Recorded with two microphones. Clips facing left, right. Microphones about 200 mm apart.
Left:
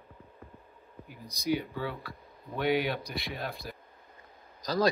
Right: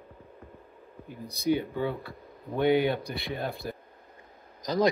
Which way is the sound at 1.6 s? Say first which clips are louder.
Right 5 dB; 20° right (ahead or behind).